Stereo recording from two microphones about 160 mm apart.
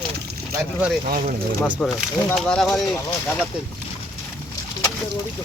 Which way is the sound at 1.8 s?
5° left (ahead or behind).